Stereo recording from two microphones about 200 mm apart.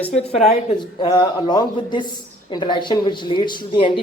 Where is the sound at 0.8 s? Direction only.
25° left (ahead or behind).